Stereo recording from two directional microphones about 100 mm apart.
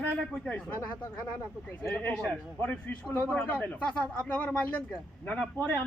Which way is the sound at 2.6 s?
20° left (ahead or behind).